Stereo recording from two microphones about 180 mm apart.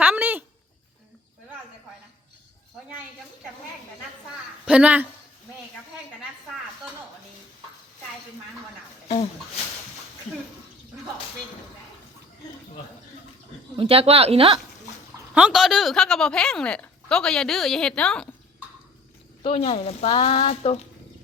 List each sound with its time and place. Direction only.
0.0 s a sound: 10° right (ahead or behind)
4.6 s speech: 5° right (ahead or behind)
13.7 s speech: 30° right (ahead or behind)
15.4 s a woman's voice: 5° right (ahead or behind)
19.4 s speech: 35° left (ahead or behind)